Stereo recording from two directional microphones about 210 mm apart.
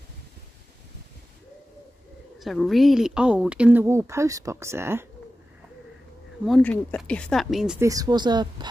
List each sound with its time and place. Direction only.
2.3 s speech: centre (ahead or behind)
6.4 s speech: 5° left (ahead or behind)
7.8 s speech: 15° right (ahead or behind)